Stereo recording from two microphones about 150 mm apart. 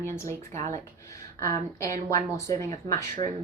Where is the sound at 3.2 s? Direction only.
50° right (ahead or behind).